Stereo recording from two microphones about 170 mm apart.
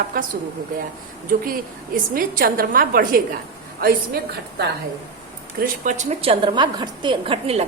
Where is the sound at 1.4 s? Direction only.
55° right (ahead or behind); by 4.7 s 70° right (ahead or behind).